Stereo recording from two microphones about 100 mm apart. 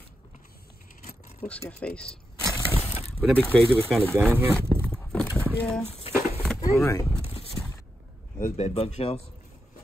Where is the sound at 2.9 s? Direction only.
90° left.